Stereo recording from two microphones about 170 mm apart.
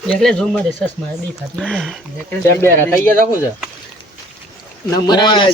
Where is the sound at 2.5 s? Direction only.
15° left (ahead or behind).